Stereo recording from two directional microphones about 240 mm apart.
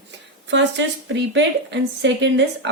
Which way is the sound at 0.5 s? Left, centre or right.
Right.